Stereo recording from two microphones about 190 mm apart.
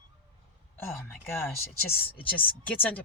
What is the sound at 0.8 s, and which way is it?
A woman's voice, 10° left (ahead or behind).